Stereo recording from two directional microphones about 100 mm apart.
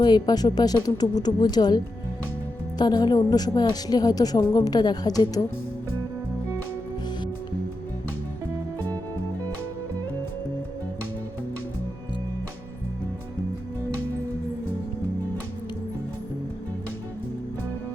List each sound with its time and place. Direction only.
0.0 s a woman's voice: 45° left (ahead or behind)